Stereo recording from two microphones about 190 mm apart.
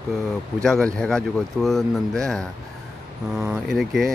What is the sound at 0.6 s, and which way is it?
Speech, 5° left (ahead or behind).